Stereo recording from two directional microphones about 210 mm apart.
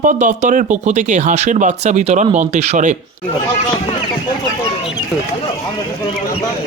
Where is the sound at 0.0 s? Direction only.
40° right (ahead or behind).